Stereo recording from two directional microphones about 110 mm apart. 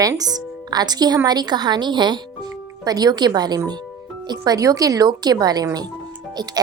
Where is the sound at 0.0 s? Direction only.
35° right (ahead or behind).